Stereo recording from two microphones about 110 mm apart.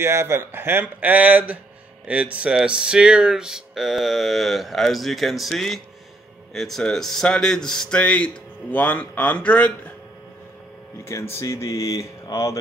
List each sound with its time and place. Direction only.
0.0 s speech: 25° right (ahead or behind); by 9.9 s 15° left (ahead or behind)
11.1 s speech: 25° left (ahead or behind)